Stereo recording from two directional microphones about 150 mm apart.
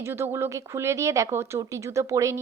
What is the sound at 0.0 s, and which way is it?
Speech, 15° right (ahead or behind).